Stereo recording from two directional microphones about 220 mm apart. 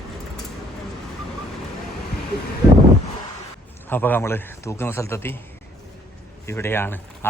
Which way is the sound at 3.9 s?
10° left (ahead or behind).